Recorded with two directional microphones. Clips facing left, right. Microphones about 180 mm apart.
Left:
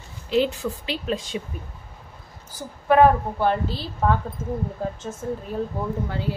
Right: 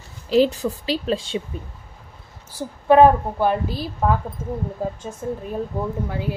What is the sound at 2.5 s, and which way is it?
A woman's voice, 20° right (ahead or behind).